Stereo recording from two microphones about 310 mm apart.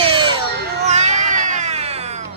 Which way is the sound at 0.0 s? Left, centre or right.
Centre.